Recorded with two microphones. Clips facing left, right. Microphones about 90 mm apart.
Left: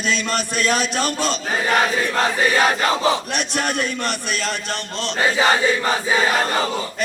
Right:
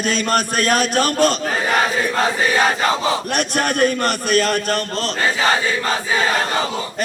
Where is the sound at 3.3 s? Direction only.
50° right (ahead or behind).